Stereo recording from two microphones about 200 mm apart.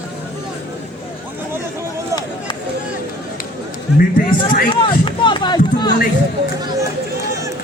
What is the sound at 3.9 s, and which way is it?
Speech, 45° left (ahead or behind).